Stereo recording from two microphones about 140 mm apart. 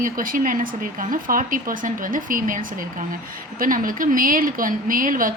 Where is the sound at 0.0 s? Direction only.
80° right.